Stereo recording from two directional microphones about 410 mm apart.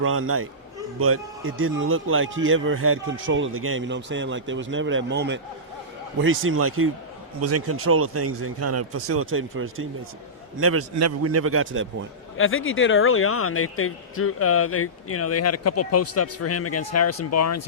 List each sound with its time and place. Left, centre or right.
0.0 s a man's voice: right
12.4 s speech: left